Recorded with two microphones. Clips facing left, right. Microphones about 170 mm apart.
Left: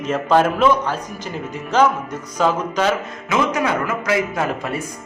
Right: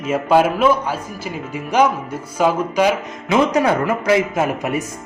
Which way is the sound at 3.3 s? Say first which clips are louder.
Right 4 dB; 30° right (ahead or behind).